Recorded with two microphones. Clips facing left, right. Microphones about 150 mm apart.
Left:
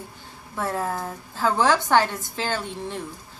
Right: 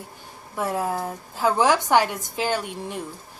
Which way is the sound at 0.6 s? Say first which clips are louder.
Right 2 dB; 15° right (ahead or behind).